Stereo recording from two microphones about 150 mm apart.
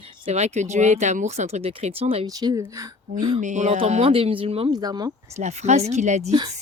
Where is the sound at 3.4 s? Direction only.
50° right (ahead or behind).